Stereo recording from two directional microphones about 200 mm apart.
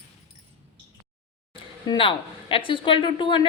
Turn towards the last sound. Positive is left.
turn(degrees=25)  # may be behind; listen again after turning